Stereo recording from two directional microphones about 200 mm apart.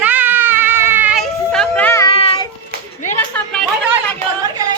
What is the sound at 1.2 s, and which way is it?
Children playing, 5° left (ahead or behind).